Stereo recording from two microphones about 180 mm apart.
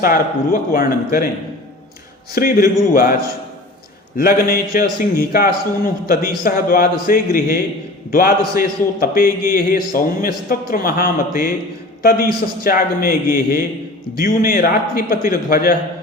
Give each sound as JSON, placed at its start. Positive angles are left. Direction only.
{"t": 0.0, "sound": "a man's voice", "side_deg": 50}
{"t": 2.3, "sound": "a man's voice", "side_deg": 55}
{"t": 4.2, "sound": "a man's voice", "side_deg": 55}